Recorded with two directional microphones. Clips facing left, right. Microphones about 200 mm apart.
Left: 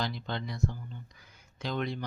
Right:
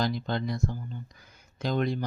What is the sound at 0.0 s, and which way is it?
Speech, 45° right (ahead or behind).